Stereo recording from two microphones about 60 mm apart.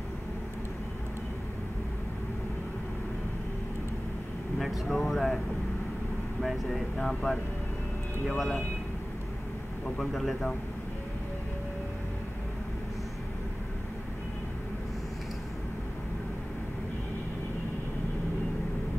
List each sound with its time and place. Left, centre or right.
4.6 s speech: centre
6.4 s speech: centre
8.4 s speech: centre
9.9 s speech: centre